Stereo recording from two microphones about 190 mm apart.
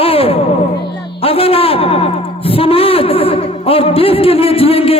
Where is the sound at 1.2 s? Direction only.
30° left (ahead or behind).